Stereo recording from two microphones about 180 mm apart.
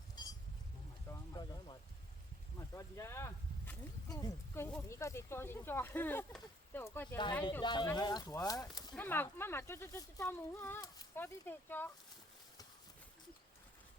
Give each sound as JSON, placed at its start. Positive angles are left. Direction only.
{"t": 1.3, "sound": "a sound", "side_deg": 25}
{"t": 2.7, "sound": "speech", "side_deg": 15}
{"t": 7.6, "sound": "speech", "side_deg": 25}
{"t": 9.0, "sound": "speech", "side_deg": 10}